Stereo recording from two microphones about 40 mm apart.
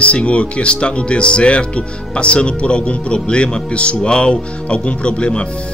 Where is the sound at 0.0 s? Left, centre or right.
Left.